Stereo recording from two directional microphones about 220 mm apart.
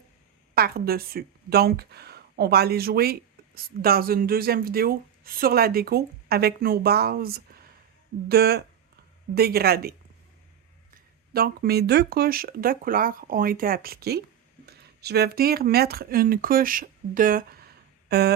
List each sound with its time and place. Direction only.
0.5 s a woman's voice: 45° right (ahead or behind)
10.9 s a woman's voice: 45° right (ahead or behind)